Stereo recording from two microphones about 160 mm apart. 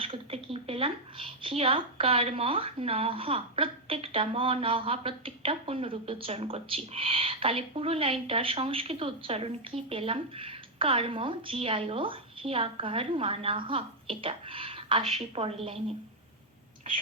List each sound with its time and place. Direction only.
0.0 s a woman's voice: 35° right (ahead or behind)